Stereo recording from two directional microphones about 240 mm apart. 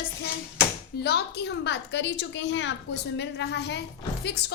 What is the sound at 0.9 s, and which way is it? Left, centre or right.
A woman's voice, left.